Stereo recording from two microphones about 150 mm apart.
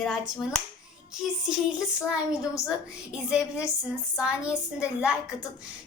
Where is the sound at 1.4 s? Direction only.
5° right (ahead or behind).